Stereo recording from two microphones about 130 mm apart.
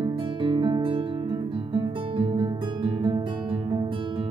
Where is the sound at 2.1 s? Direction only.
40° right (ahead or behind).